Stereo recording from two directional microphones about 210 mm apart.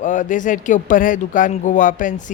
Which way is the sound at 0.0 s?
35° left (ahead or behind).